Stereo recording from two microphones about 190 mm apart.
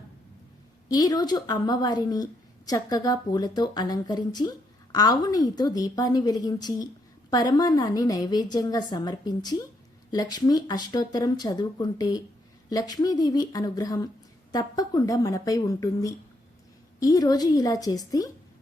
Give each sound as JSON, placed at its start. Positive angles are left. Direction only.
{"t": 0.9, "sound": "speech", "side_deg": 20}